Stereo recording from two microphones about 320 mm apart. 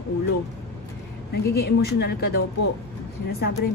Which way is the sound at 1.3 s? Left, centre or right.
Left.